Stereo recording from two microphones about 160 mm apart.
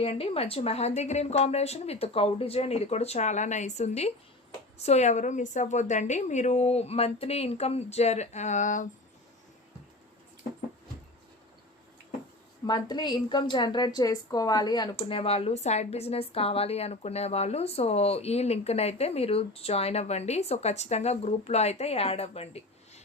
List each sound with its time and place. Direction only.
0.0 s a woman's voice: 40° left (ahead or behind)
12.6 s a woman's voice: 25° left (ahead or behind)
15.2 s a woman's voice: 40° left (ahead or behind)